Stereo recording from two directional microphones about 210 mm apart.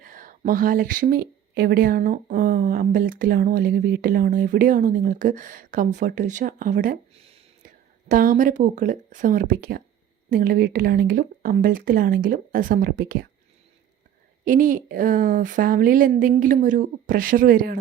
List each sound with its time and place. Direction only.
0.0 s a woman's voice: 40° right (ahead or behind)
14.4 s a woman's voice: 40° right (ahead or behind)